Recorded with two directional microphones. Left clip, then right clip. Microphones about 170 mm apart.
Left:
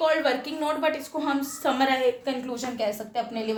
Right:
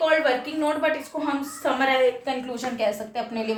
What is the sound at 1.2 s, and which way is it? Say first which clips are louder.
Speech: even; 75° left (ahead or behind).